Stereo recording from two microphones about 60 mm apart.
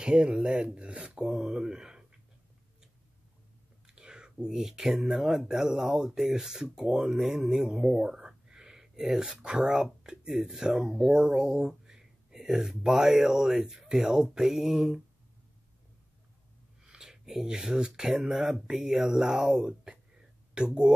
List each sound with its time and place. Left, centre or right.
0.0 s speech: centre
3.8 s speech: centre
16.8 s speech: centre